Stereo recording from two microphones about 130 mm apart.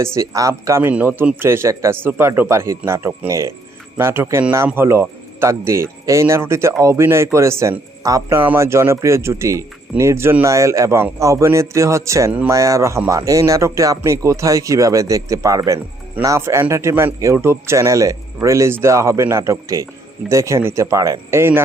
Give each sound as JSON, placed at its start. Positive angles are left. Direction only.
{"t": 0.0, "sound": "a man's voice", "side_deg": -20}